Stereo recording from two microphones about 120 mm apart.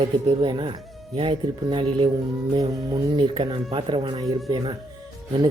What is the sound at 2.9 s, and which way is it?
Speech, 50° right (ahead or behind).